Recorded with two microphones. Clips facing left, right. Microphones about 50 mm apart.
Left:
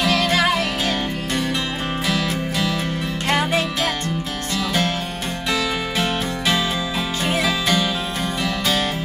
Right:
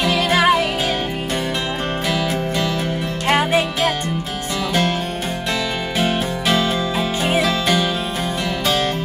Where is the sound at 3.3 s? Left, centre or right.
Centre.